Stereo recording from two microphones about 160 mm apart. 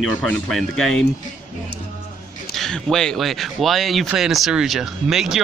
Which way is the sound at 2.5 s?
Centre (ahead or behind).